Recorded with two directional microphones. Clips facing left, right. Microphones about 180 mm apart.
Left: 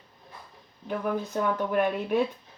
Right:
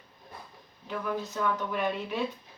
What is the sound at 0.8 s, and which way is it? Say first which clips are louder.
Speech: left 4 dB; 50° left (ahead or behind).